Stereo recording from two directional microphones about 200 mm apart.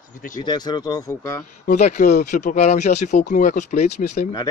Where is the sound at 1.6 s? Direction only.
40° left (ahead or behind).